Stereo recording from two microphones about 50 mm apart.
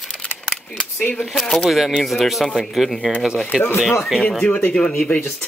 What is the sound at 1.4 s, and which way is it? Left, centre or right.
Speech, centre.